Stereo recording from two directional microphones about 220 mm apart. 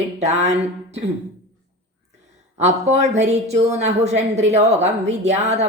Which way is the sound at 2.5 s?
30° right (ahead or behind).